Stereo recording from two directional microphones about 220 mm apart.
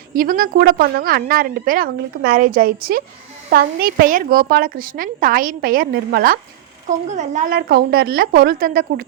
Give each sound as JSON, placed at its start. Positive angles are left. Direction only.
{"t": 0.1, "sound": "a woman's voice", "side_deg": -40}